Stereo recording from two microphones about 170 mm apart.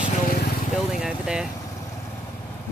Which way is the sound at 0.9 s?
5° right (ahead or behind).